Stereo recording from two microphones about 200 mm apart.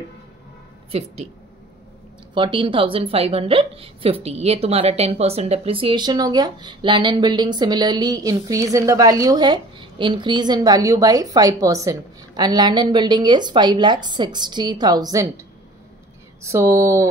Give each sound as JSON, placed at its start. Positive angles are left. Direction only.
{"t": 2.3, "sound": "a woman's voice", "side_deg": -25}
{"t": 16.4, "sound": "speech", "side_deg": -15}